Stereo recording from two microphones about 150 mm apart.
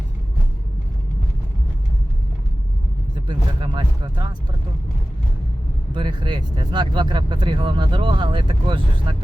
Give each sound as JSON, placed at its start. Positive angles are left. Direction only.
{"t": 3.2, "sound": "speech", "side_deg": -30}
{"t": 5.9, "sound": "speech", "side_deg": -30}